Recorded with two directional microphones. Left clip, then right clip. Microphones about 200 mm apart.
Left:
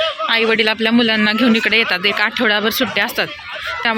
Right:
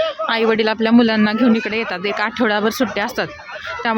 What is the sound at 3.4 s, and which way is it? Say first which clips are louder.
Chicken: left 3 dB; 50° right (ahead or behind).